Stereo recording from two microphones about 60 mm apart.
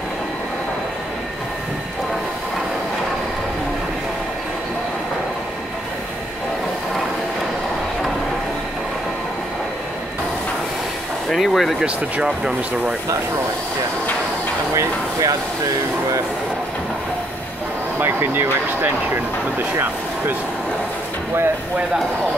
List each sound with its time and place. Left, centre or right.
11.3 s speech: centre
11.8 s speech: centre
14.7 s speech: right
18.0 s speech: right